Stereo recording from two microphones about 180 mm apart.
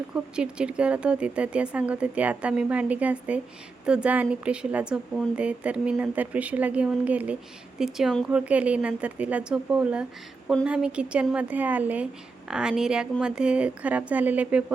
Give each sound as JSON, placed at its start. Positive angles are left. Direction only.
{"t": 0.1, "sound": "a woman's voice", "side_deg": -5}